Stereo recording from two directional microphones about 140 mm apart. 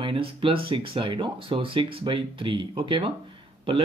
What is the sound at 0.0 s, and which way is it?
Speech, 40° right (ahead or behind).